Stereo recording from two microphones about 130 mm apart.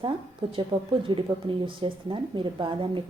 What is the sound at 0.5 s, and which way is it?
Speech, 40° right (ahead or behind).